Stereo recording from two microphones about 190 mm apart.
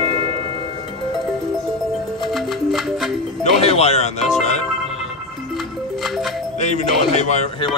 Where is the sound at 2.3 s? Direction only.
Centre (ahead or behind).